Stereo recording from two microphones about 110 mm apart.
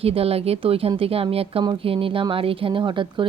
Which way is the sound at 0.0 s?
65° right (ahead or behind).